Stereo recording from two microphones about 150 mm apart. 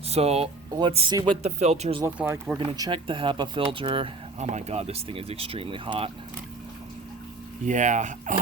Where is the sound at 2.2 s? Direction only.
10° right (ahead or behind).